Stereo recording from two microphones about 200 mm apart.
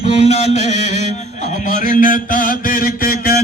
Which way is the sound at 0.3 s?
35° left (ahead or behind).